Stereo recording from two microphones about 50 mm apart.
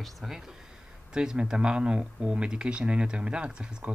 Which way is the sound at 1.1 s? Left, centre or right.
Centre.